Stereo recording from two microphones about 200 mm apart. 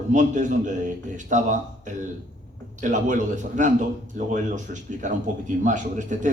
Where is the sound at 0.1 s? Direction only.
40° right (ahead or behind).